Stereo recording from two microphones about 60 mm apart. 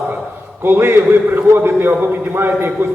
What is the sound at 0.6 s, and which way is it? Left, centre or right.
A man's voice, right.